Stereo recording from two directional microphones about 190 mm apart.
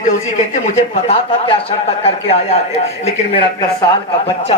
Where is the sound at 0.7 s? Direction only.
35° left (ahead or behind).